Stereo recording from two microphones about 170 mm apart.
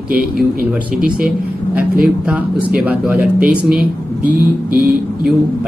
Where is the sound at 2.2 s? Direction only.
10° right (ahead or behind).